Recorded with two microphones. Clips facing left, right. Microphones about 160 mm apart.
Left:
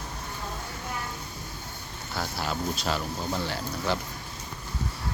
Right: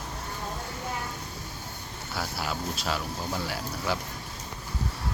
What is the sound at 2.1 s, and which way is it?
Speech, 5° right (ahead or behind).